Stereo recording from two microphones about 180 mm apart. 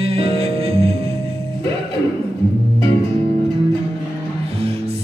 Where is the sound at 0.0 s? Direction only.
30° right (ahead or behind).